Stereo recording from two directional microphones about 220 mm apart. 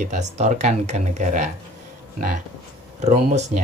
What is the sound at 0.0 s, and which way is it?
Speech, 30° right (ahead or behind).